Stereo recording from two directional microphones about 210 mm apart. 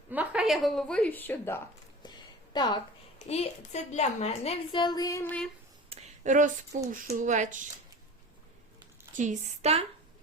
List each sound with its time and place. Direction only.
0.1 s a woman's voice: 5° right (ahead or behind); by 1.6 s 10° left (ahead or behind)
2.0 s a sound: 20° left (ahead or behind)
3.2 s a woman's voice: 30° left (ahead or behind); by 5.5 s 10° left (ahead or behind)
5.9 s a sound: 35° right (ahead or behind)
6.9 s speech: 40° right (ahead or behind)
9.1 s speech: 35° right (ahead or behind)